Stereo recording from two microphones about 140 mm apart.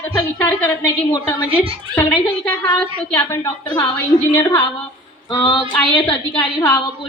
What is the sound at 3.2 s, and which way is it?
Speech, 20° left (ahead or behind).